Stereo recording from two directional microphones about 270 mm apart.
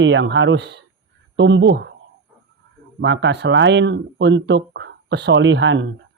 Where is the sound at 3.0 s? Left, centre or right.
Right.